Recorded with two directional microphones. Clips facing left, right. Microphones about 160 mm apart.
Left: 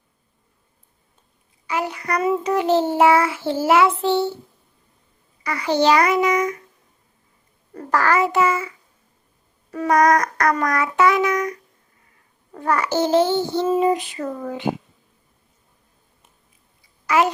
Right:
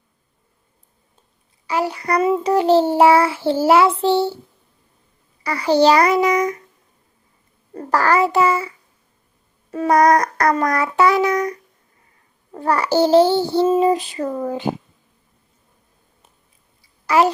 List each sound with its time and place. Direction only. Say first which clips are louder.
1.6 s a child's voice: right 4 dB; 35° right (ahead or behind)
5.4 s a child's voice: right 4 dB; 35° right (ahead or behind)
7.8 s a child's voice: right 2 dB; 35° right (ahead or behind)
9.7 s a child's voice: right 2 dB; 30° right (ahead or behind)
17.1 s a child's voice: right 3 dB; 35° right (ahead or behind)